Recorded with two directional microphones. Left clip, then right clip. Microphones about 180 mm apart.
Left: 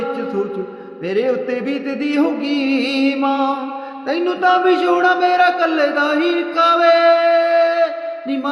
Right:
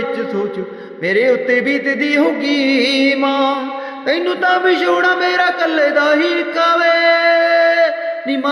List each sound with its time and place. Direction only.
1.0 s music: 25° right (ahead or behind)
4.1 s a man's voice: 20° right (ahead or behind)